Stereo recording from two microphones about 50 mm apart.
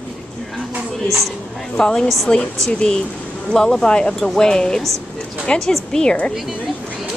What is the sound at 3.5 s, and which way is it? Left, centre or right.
Speech, centre.